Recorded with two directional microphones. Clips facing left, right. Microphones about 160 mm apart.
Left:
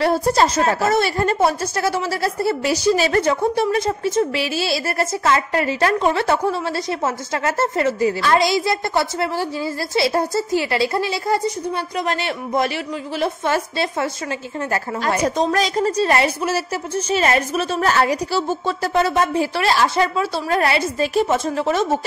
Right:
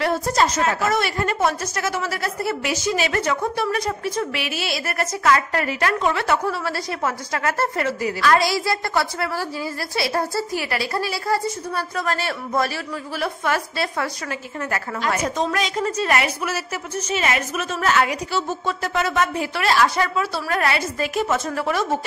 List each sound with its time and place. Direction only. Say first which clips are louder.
0.0 s a woman's voice: left 4 dB; 30° left (ahead or behind)